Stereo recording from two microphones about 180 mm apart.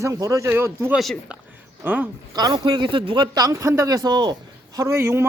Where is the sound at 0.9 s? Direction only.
Centre (ahead or behind).